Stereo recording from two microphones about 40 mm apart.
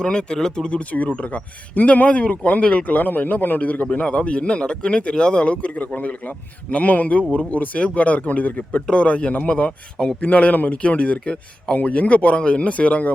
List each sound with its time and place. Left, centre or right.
0.0 s speech: left
0.8 s speech: left
2.8 s speech: left
8.9 s speech: left